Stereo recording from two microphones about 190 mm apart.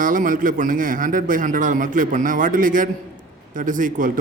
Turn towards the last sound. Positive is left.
turn(degrees=-45)  # may be behind; listen again after turning